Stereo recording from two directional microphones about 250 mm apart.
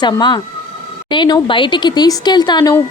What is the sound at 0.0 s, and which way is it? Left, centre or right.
Speech, centre.